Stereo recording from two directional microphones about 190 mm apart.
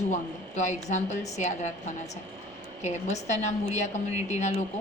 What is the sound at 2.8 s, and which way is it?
Speech, 35° left (ahead or behind).